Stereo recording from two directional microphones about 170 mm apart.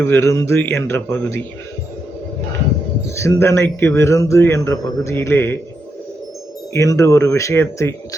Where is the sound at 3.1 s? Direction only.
15° left (ahead or behind).